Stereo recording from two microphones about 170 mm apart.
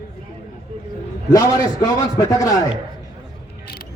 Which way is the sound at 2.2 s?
20° left (ahead or behind).